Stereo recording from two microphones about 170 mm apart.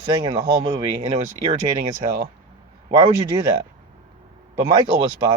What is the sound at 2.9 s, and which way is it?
Speech, 25° right (ahead or behind).